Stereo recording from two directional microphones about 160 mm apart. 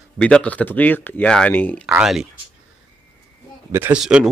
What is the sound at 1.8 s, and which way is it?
Speech, 5° right (ahead or behind).